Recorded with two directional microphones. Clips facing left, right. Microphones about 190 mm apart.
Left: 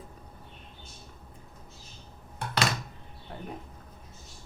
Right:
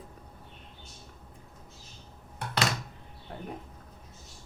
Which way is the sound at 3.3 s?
50° right (ahead or behind).